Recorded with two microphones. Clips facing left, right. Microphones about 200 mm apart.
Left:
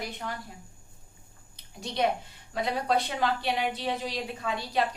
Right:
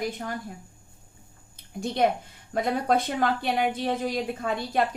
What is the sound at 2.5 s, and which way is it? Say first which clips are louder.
Speech: right 3 dB; 50° right (ahead or behind).